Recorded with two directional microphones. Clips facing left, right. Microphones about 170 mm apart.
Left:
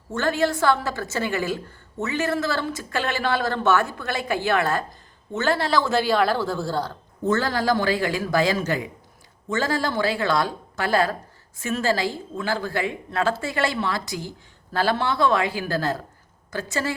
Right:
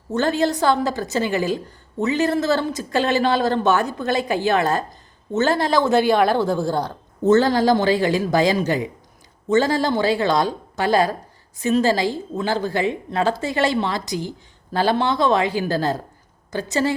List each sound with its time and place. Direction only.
0.2 s a woman's voice: 20° right (ahead or behind)